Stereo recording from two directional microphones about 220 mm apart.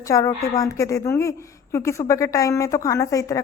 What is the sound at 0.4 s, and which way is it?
Speech, 15° left (ahead or behind).